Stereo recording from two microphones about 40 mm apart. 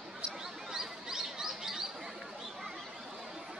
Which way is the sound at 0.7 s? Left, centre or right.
Centre.